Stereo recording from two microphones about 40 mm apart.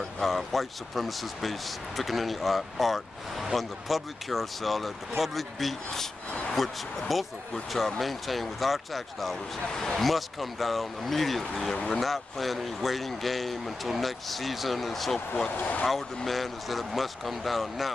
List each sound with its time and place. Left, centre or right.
0.2 s speech: centre
15.5 s speech: left
16.3 s speech: centre